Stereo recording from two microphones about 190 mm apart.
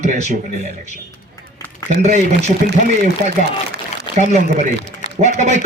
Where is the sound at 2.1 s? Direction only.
40° right (ahead or behind).